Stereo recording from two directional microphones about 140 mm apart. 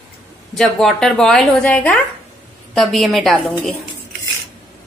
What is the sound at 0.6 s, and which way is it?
A woman's voice, 5° left (ahead or behind).